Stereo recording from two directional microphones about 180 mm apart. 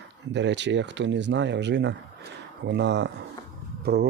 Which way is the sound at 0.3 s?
80° right.